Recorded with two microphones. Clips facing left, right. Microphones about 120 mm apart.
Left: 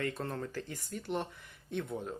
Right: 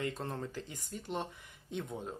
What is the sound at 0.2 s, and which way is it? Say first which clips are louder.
A man's voice: left 2 dB; 20° right (ahead or behind).